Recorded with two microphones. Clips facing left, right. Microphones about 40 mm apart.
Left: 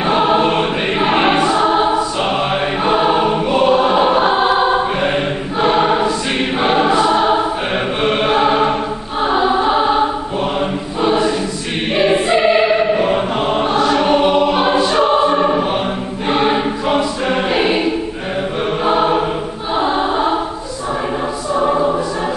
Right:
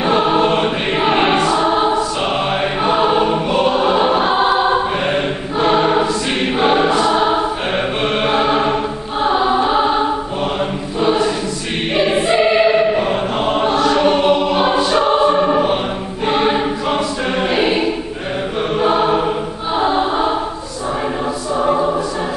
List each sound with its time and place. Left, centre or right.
0.0 s choir: centre
6.9 s choir: centre
8.2 s choir: centre
21.6 s choir: centre